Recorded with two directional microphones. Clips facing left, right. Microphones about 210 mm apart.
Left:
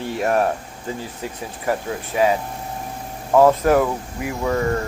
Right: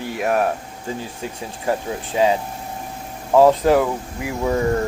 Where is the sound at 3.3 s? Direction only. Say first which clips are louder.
Right 1 dB; 15° right (ahead or behind).